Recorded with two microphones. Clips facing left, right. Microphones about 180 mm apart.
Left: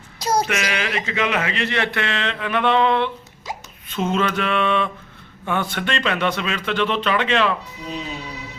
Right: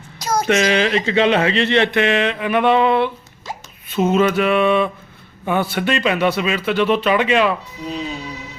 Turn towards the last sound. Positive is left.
turn(degrees=-10)  # may be behind; listen again after turning